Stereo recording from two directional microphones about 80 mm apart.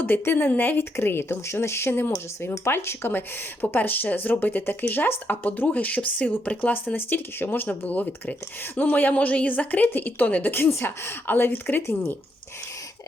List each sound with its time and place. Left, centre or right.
0.0 s speech: left